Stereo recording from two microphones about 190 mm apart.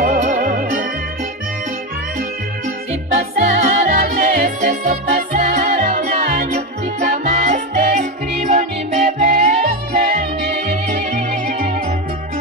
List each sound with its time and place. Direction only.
0.0 s music: 45° right (ahead or behind)
2.9 s music: 40° right (ahead or behind)